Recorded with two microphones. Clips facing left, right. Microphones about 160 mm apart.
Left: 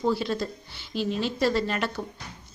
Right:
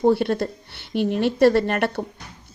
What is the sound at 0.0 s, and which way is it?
A woman's voice, 60° right (ahead or behind).